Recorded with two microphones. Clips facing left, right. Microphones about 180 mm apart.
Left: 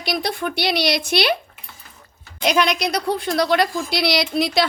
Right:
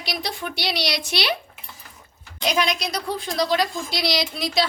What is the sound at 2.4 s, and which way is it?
A woman's voice, 65° left (ahead or behind).